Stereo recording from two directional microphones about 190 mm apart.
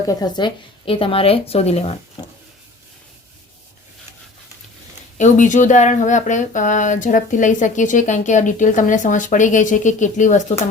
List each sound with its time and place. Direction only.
0.1 s a woman's voice: 20° left (ahead or behind)
5.1 s speech: 40° left (ahead or behind)